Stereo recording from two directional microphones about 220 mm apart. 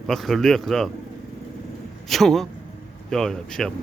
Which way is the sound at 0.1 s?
Centre (ahead or behind).